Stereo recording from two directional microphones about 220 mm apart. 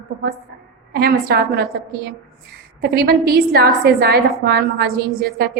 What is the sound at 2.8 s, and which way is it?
A woman's voice, 45° right (ahead or behind).